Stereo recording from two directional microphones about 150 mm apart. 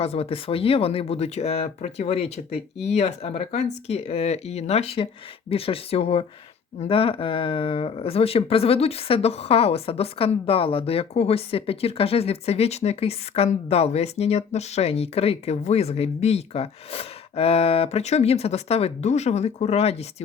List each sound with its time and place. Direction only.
0.0 s speech: 40° left (ahead or behind)